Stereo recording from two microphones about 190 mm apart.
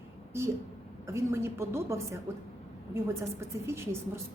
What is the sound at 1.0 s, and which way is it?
Speech, 15° right (ahead or behind).